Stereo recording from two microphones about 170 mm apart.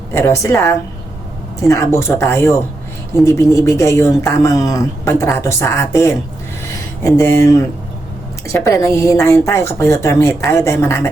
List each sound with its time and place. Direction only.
0.1 s speech: 15° left (ahead or behind)